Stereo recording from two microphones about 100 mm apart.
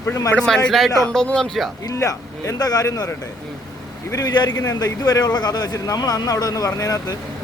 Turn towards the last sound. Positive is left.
turn(degrees=35)  # may be behind; listen again after turning